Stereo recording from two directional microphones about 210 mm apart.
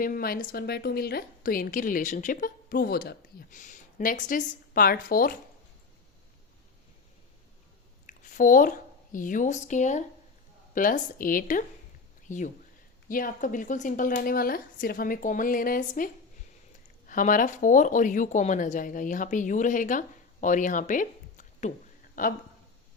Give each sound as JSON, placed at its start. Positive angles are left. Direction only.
{"t": 0.0, "sound": "a woman's voice", "side_deg": 45}
{"t": 8.0, "sound": "a sound", "side_deg": 40}
{"t": 9.1, "sound": "a woman's voice", "side_deg": 40}
{"t": 17.1, "sound": "a woman's voice", "side_deg": 40}